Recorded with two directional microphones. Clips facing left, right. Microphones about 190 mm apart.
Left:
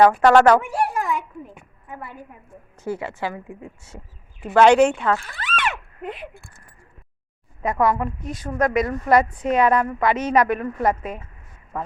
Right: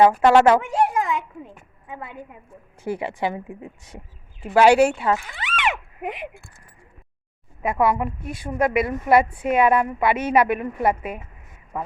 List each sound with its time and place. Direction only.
0.2 s a sound: 25° right (ahead or behind)
2.7 s a woman's voice: 15° right (ahead or behind)
7.6 s a woman's voice: 5° right (ahead or behind)